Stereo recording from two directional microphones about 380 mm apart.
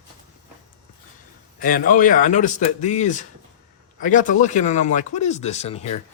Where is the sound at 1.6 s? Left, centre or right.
Left.